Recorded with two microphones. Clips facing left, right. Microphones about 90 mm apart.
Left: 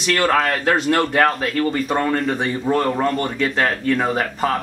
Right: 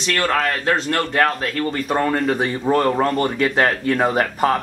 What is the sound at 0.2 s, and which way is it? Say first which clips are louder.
Speech: left 2 dB; 5° left (ahead or behind).